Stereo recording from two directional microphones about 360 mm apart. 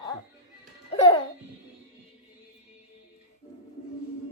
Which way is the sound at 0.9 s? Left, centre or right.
Centre.